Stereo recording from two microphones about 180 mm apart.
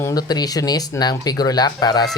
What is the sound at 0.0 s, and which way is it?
Speech, 20° left (ahead or behind).